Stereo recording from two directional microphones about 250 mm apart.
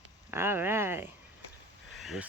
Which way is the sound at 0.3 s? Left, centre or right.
Centre.